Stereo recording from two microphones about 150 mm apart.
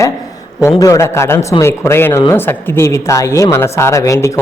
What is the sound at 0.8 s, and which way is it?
A man's voice, 20° left (ahead or behind).